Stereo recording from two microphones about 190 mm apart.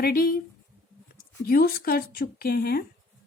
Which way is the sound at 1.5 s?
50° left (ahead or behind).